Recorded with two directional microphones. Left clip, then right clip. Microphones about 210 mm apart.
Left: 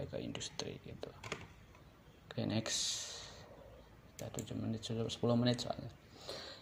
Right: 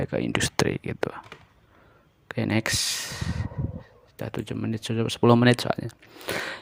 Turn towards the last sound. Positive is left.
turn(degrees=-50)  # may be behind; listen again after turning